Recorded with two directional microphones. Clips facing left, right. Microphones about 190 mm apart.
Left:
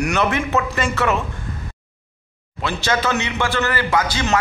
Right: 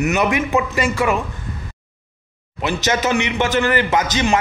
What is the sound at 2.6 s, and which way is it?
A man's voice, 15° right (ahead or behind).